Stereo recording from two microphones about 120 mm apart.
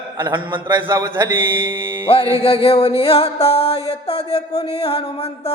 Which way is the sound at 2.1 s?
50° left (ahead or behind).